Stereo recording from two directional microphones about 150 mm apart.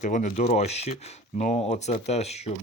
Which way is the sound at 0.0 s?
55° left (ahead or behind).